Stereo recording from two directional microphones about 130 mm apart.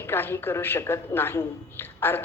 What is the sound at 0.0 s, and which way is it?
A woman's voice, 15° left (ahead or behind).